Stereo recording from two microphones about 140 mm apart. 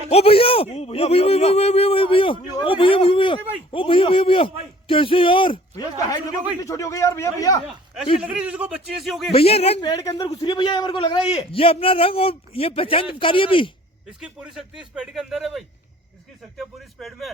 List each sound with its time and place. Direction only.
0.1 s speech: 45° left (ahead or behind)
2.6 s a sound: 40° left (ahead or behind)
3.7 s a man's voice: 40° left (ahead or behind)
5.7 s a sound: 25° left (ahead or behind)
6.6 s speech: 20° left (ahead or behind)
8.2 s a man's voice: 10° right (ahead or behind)
9.3 s speech: 45° left (ahead or behind)
9.8 s a man's voice: 30° left (ahead or behind)
14.2 s speech: 5° right (ahead or behind)